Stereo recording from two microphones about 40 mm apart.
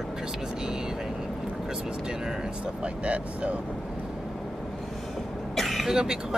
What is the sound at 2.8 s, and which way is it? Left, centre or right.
Speech, right.